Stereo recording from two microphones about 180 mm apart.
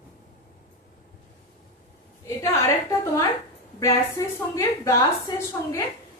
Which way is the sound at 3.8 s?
15° left (ahead or behind).